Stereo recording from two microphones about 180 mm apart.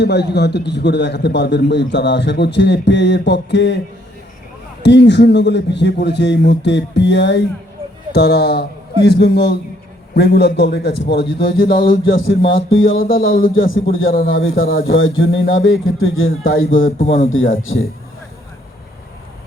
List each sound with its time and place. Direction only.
0.0 s a man's voice: 65° left (ahead or behind)
4.8 s a man's voice: 75° left (ahead or behind)
12.5 s speech: 90° left